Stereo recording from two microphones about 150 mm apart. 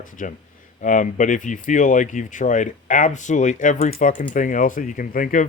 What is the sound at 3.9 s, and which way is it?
Speech, 65° left (ahead or behind).